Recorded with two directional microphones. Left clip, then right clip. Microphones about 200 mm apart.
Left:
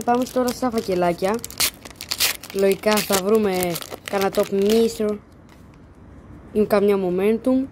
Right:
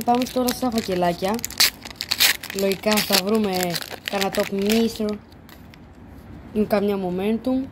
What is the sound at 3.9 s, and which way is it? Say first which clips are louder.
Speech: left 2 dB; 25° left (ahead or behind).